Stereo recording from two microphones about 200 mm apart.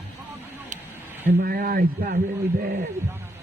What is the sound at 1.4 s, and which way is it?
A man's voice, 50° right (ahead or behind).